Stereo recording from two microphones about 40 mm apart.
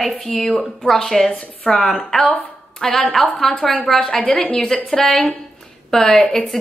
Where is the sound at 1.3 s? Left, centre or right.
Left.